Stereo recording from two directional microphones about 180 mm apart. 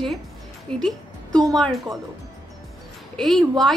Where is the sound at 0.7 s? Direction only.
5° left (ahead or behind).